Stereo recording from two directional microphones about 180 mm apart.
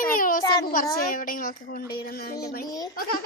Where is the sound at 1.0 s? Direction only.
50° left (ahead or behind).